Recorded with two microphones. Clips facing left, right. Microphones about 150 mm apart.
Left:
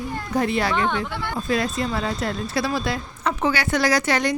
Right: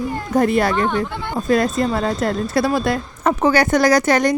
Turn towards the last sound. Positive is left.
turn(degrees=-45)  # may be behind; listen again after turning